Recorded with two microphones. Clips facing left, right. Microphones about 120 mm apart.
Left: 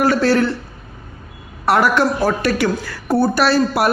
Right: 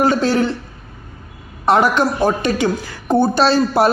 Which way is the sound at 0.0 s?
20° right (ahead or behind).